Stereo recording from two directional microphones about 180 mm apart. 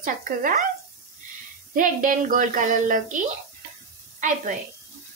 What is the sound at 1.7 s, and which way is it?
A woman's voice, 45° right (ahead or behind).